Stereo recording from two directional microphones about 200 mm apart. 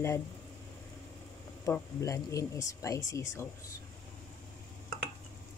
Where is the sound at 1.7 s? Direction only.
15° left (ahead or behind).